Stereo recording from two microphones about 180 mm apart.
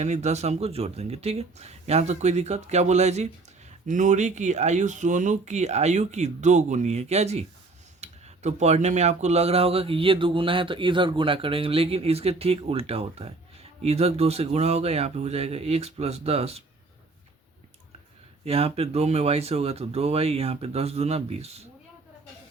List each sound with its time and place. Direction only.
0.0 s speech: 40° right (ahead or behind)
18.4 s speech: 35° right (ahead or behind)